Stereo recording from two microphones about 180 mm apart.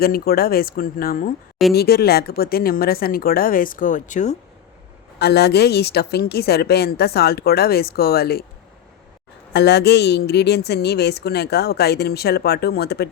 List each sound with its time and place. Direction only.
0.0 s a woman's voice: 55° left (ahead or behind)
5.2 s a woman's voice: 65° left (ahead or behind)
9.5 s a woman's voice: 70° left (ahead or behind)